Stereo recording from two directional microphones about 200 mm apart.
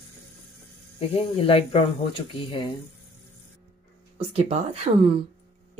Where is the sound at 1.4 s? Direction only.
30° left (ahead or behind).